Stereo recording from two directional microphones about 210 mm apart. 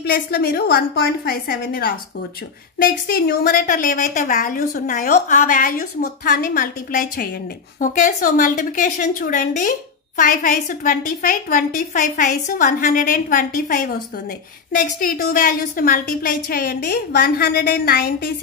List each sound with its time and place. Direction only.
0.0 s a woman's voice: 50° left (ahead or behind)
15.0 s a woman's voice: 40° left (ahead or behind)